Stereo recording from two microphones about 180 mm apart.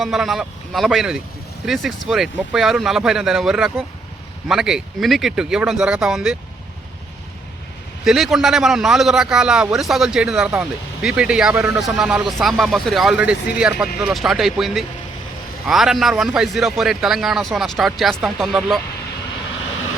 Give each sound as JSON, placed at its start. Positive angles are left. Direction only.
{"t": 0.0, "sound": "a man's voice", "side_deg": 0}
{"t": 8.0, "sound": "a man's voice", "side_deg": 0}